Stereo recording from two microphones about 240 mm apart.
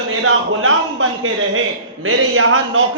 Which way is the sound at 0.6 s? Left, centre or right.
Right.